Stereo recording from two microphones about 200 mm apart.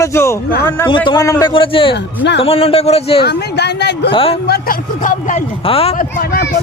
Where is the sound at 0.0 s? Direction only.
15° left (ahead or behind); by 3.2 s 30° left (ahead or behind).